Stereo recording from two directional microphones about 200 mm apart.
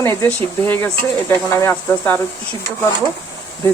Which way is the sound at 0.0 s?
10° left (ahead or behind).